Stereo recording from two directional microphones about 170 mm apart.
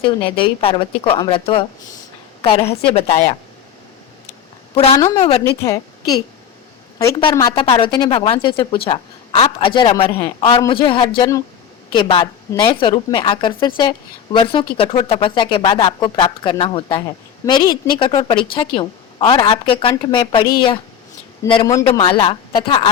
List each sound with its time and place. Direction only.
0.0 s a woman's voice: 30° left (ahead or behind)
2.9 s a woman's voice: 40° left (ahead or behind)
4.7 s a woman's voice: 40° left (ahead or behind)
4.9 s a man's voice: 15° left (ahead or behind)
7.5 s speech: 30° left (ahead or behind)
10.1 s a man's voice: 15° left (ahead or behind)
10.6 s speech: 30° left (ahead or behind)
11.2 s speech: 20° left (ahead or behind)
11.9 s speech: 30° left (ahead or behind)